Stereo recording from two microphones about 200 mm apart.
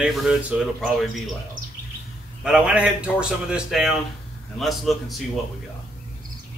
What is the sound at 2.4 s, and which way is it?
Speech, 5° right (ahead or behind).